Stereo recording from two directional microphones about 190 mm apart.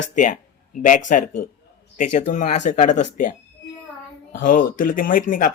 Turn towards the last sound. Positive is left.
turn(degrees=45)  # may be behind; listen again after turning